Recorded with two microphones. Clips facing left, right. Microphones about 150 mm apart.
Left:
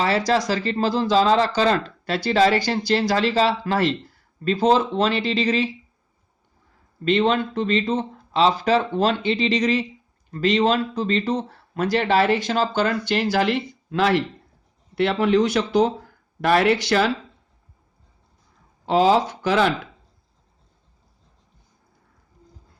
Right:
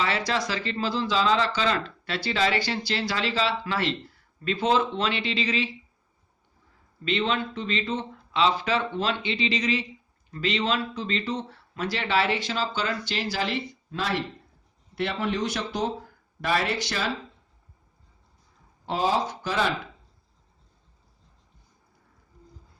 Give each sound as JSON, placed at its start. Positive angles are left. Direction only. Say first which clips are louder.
{"t": 0.0, "sound": "speech", "louder": "left 7 dB", "side_deg": 40}
{"t": 7.0, "sound": "speech", "louder": "left 7 dB", "side_deg": 45}
{"t": 14.9, "sound": "speech", "louder": "left 9 dB", "side_deg": 90}
{"t": 16.4, "sound": "speech", "louder": "left 8 dB", "side_deg": 65}
{"t": 18.9, "sound": "speech", "louder": "left 8 dB", "side_deg": 90}